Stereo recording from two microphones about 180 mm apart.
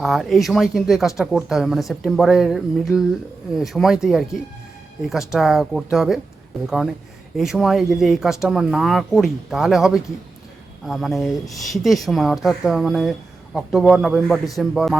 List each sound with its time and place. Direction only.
0.0 s speech: centre (ahead or behind)
7.3 s speech: centre (ahead or behind)